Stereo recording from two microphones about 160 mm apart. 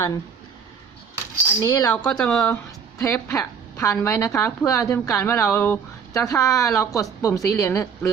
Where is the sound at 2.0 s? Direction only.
5° left (ahead or behind).